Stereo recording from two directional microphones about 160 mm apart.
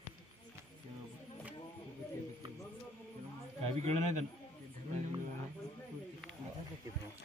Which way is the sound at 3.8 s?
45° right (ahead or behind).